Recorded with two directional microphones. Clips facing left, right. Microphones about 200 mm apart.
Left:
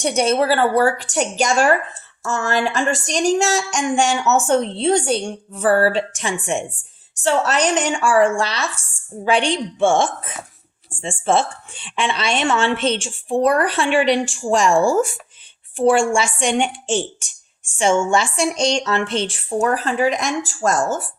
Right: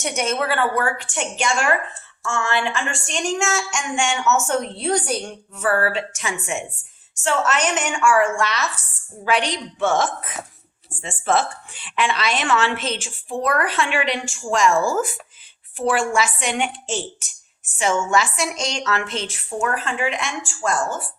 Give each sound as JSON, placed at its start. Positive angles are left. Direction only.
{"t": 0.0, "sound": "a woman's voice", "side_deg": 35}
{"t": 12.7, "sound": "a woman's voice", "side_deg": -5}
{"t": 13.0, "sound": "a woman's voice", "side_deg": 30}
{"t": 17.7, "sound": "speech", "side_deg": 30}